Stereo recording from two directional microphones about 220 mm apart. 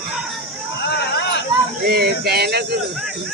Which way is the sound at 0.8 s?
50° left (ahead or behind).